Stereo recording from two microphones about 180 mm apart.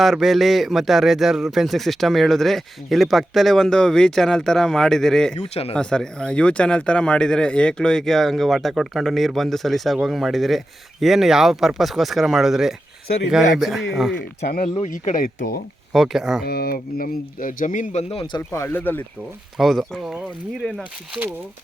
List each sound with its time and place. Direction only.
0.0 s a man's voice: centre (ahead or behind)
5.4 s speech: 35° left (ahead or behind)
5.7 s a man's voice: 5° left (ahead or behind)
14.6 s speech: 30° left (ahead or behind)
14.8 s speech: 45° left (ahead or behind)
15.9 s a man's voice: centre (ahead or behind)
16.5 s speech: 60° left (ahead or behind)
18.1 s a man's voice: 30° left (ahead or behind); by 21.3 s centre (ahead or behind)